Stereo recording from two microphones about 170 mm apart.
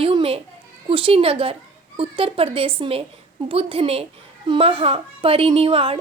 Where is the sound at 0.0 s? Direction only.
30° right (ahead or behind).